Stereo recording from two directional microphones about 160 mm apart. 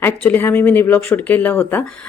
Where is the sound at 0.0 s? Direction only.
10° left (ahead or behind).